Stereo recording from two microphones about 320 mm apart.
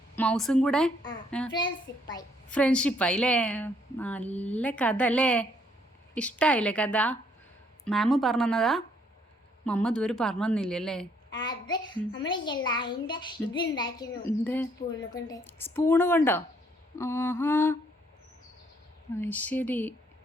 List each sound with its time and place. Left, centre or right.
0.2 s a child's voice: centre
1.5 s a child's voice: centre
11.3 s a child's voice: centre
19.1 s a child's voice: centre